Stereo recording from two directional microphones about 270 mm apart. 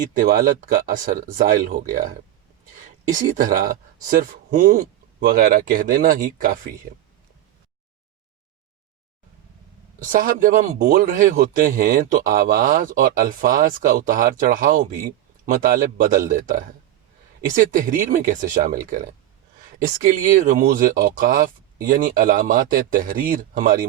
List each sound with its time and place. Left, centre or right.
0.2 s a man's voice: right
3.1 s a man's voice: right
10.0 s a man's voice: right